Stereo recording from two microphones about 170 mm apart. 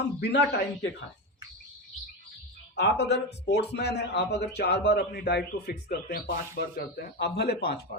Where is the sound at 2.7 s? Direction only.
85° left.